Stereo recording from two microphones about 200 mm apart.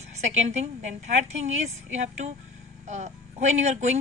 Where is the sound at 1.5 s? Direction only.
35° right (ahead or behind).